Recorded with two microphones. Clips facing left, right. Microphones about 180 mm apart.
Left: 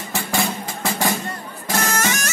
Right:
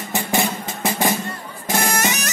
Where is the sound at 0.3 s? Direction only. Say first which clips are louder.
Right 1 dB; 20° right (ahead or behind).